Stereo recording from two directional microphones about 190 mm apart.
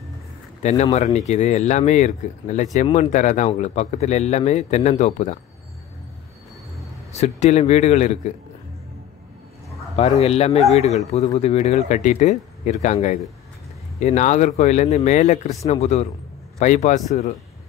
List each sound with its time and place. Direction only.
0.6 s speech: 35° left (ahead or behind)
7.1 s speech: 35° left (ahead or behind)
9.9 s speech: 35° left (ahead or behind)